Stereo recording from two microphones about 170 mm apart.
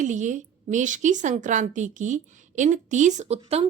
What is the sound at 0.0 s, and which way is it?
A woman's voice, 45° right (ahead or behind).